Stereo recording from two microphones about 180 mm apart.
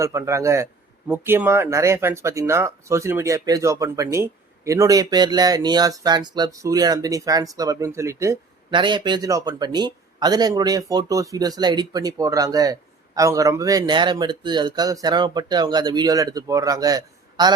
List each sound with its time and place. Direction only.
0.0 s speech: 15° right (ahead or behind)